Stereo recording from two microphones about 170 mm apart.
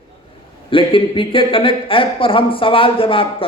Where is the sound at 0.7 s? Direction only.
30° left (ahead or behind).